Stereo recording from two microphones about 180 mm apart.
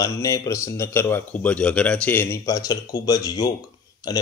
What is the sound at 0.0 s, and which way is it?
Speech, 20° left (ahead or behind).